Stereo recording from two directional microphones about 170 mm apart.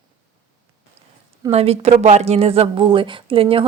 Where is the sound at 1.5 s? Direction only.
35° right (ahead or behind).